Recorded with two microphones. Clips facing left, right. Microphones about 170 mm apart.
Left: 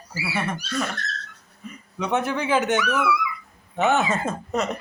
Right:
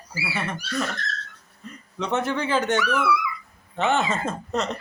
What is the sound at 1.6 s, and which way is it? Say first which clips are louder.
A man's voice: left 1 dB; 10° left (ahead or behind).